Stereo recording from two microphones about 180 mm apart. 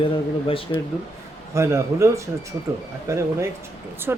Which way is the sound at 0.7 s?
25° left (ahead or behind).